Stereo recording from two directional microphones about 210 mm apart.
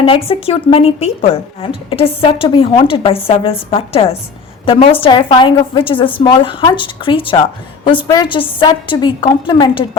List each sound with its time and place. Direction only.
0.0 s speech: 25° left (ahead or behind)